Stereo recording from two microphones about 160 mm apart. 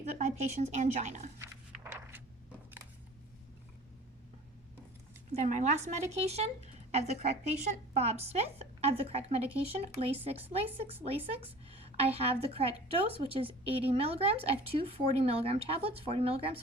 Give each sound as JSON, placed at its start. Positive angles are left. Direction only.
{"t": 0.0, "sound": "a woman's voice", "side_deg": -45}
{"t": 1.4, "sound": "walk", "side_deg": -15}
{"t": 5.4, "sound": "a woman's voice", "side_deg": -50}